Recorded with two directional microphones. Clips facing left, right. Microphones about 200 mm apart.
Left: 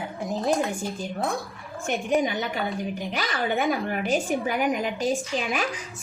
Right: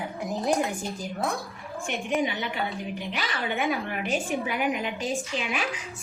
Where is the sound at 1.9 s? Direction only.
40° left (ahead or behind).